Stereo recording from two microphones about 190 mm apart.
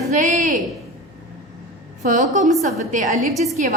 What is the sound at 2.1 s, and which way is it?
A woman's voice, 40° right (ahead or behind).